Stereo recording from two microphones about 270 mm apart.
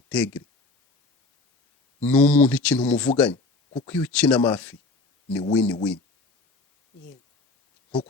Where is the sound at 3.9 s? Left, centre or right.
Centre.